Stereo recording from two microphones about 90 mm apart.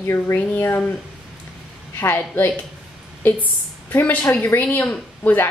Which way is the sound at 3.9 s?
20° left (ahead or behind).